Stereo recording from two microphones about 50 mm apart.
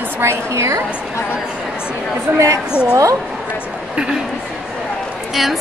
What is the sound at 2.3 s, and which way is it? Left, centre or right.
Speech, right.